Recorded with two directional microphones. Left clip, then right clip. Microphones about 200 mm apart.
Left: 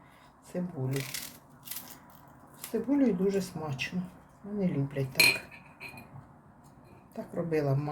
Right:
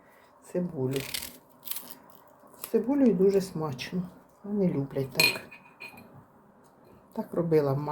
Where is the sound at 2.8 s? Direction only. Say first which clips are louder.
Right 4 dB; 25° right (ahead or behind).